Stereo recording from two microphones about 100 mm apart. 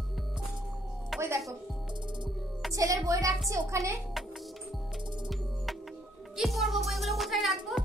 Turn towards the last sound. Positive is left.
turn(degrees=0)  # may be behind; listen again after turning